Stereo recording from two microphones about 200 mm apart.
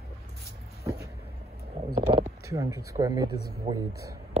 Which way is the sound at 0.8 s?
15° right (ahead or behind).